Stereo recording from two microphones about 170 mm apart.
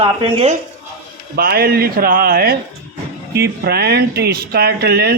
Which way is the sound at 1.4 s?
60° right (ahead or behind).